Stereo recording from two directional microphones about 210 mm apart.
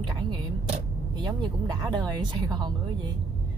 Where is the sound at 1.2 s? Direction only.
20° right (ahead or behind).